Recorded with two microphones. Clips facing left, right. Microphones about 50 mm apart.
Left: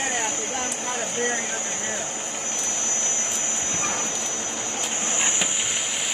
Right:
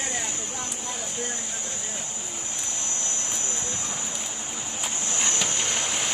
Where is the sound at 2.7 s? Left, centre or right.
Left.